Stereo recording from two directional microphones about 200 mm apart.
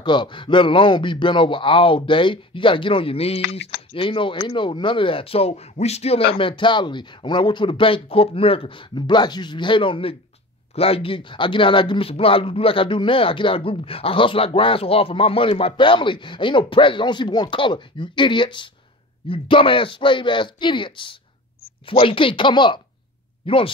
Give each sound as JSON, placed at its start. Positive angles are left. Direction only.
{"t": 0.0, "sound": "speech", "side_deg": 20}